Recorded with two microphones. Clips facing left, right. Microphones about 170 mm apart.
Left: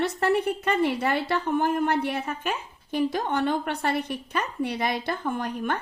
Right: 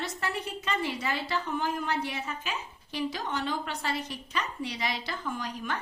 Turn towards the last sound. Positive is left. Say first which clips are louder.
# left 6 dB
turn(degrees=55)  # may be behind; listen again after turning